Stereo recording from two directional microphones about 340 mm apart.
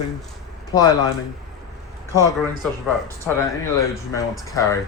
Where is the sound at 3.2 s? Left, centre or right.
Centre.